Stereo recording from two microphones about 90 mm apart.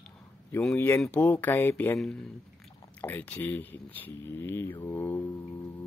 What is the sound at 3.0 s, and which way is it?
Speech, 20° left (ahead or behind).